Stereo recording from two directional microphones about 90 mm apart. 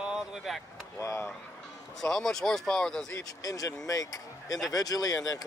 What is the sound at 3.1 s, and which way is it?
Speech, 40° left (ahead or behind).